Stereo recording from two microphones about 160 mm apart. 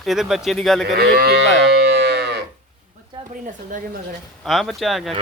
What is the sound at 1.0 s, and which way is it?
Speech, 70° right (ahead or behind).